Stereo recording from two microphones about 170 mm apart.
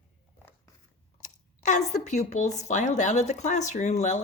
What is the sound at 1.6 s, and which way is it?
Speech, 45° left (ahead or behind).